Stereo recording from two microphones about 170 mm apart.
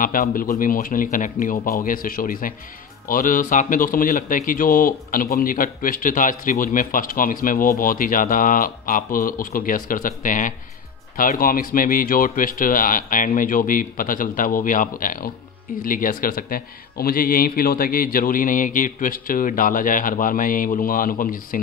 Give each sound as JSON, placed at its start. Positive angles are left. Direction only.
{"t": 0.0, "sound": "a man's voice", "side_deg": 55}